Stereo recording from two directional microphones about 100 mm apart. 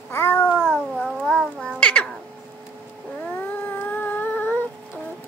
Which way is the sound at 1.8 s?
10° left (ahead or behind).